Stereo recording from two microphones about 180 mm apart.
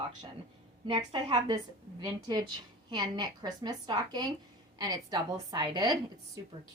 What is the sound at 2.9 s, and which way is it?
Speech, 20° right (ahead or behind).